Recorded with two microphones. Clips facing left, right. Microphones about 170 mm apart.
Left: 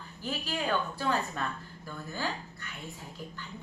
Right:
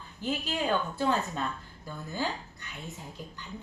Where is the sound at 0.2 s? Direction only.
20° right (ahead or behind).